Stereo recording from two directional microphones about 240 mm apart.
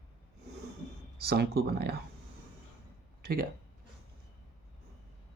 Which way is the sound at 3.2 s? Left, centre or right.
Right.